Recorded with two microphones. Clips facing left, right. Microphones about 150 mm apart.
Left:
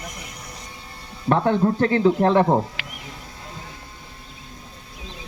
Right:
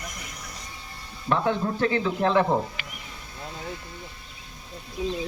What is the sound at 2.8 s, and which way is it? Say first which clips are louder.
Wild animals: left 3 dB; 90° left.